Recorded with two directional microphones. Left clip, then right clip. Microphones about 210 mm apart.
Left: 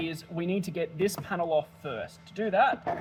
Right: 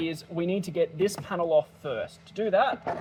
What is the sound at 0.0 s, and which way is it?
Speech, 25° right (ahead or behind).